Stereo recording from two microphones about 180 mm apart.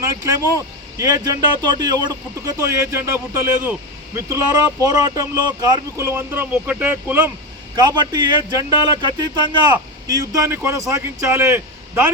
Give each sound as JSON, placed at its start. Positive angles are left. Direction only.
{"t": 0.0, "sound": "speech", "side_deg": -15}
{"t": 7.8, "sound": "speech", "side_deg": -25}